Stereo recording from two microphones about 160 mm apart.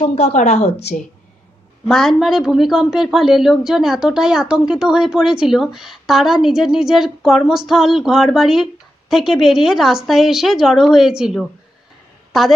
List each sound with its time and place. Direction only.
0.0 s a woman's voice: 45° left (ahead or behind)
1.9 s a woman's voice: centre (ahead or behind)